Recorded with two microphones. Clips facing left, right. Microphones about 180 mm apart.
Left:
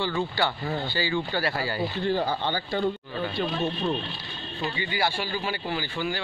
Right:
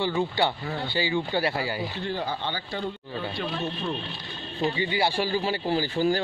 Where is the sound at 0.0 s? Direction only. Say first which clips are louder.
Right 2 dB; 20° right (ahead or behind).